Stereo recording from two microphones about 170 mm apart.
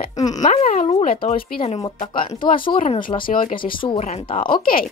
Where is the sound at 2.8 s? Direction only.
50° left (ahead or behind).